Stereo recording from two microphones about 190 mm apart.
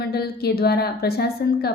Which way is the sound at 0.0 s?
55° left (ahead or behind).